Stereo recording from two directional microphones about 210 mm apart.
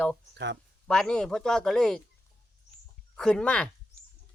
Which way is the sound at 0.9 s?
5° left (ahead or behind).